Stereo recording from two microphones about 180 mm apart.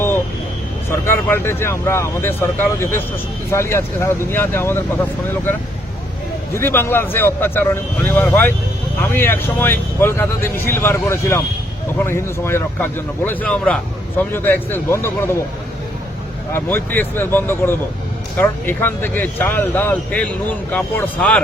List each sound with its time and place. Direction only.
0.9 s speech: 15° left (ahead or behind)
6.5 s speech: 15° left (ahead or behind)
16.5 s speech: 15° left (ahead or behind)